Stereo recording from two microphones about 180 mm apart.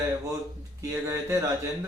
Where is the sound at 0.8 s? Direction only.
15° right (ahead or behind).